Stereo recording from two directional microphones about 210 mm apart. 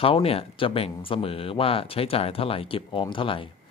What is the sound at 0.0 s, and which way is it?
Speech, 25° left (ahead or behind).